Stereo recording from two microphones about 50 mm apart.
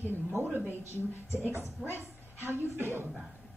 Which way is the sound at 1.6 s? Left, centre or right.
Left.